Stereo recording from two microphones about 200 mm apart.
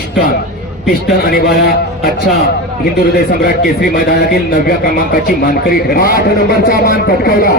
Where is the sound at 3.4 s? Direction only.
50° left (ahead or behind).